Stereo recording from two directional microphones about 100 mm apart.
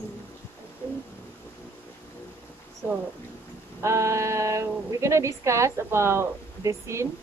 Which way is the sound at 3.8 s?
30° right (ahead or behind).